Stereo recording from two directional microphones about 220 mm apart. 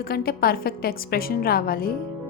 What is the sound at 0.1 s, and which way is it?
A woman's voice, 45° left (ahead or behind).